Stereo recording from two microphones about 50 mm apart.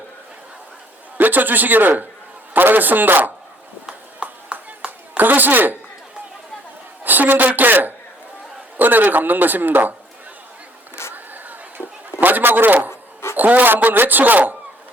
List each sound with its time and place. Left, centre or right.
1.2 s speech: right
3.8 s horse: right
5.1 s a woman's voice: right
7.0 s a woman's voice: right
11.0 s a sound: left
11.8 s a sound: left
12.2 s a man's voice: right